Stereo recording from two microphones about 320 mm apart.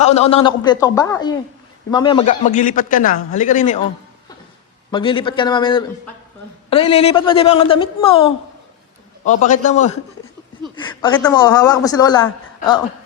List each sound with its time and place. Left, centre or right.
0.0 s a man's voice: centre
4.9 s a man's voice: centre